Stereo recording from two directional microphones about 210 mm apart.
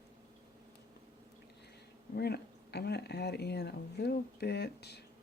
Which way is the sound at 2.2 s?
50° left (ahead or behind).